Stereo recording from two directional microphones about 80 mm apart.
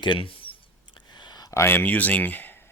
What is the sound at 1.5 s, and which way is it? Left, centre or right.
Speech, left.